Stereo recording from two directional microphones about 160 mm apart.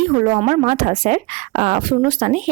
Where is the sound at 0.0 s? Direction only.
45° right (ahead or behind).